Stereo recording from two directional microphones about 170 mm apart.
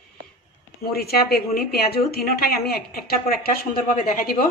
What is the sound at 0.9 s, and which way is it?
A woman's voice, 65° left (ahead or behind).